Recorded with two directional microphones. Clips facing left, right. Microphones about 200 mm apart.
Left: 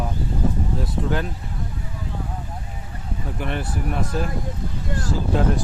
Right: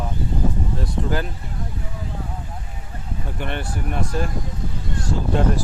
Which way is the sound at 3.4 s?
Centre (ahead or behind).